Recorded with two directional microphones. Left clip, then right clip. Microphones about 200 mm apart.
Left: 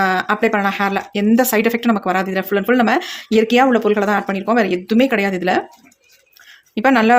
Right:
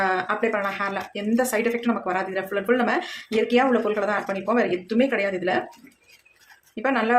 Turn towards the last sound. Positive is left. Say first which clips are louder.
# left 9 dB
turn(degrees=55)  # may be behind; listen again after turning